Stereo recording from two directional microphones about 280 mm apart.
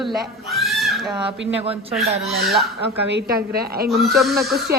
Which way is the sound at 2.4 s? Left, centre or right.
Centre.